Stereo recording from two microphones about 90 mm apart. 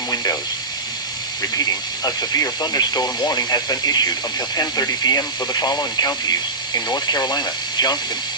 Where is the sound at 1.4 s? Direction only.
45° left (ahead or behind).